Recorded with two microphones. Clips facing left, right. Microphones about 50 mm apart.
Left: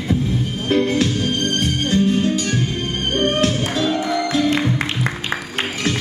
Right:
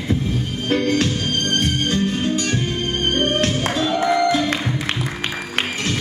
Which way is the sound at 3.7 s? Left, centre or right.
Right.